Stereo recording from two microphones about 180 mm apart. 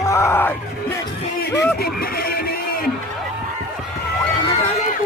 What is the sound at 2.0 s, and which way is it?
Music, 55° left (ahead or behind).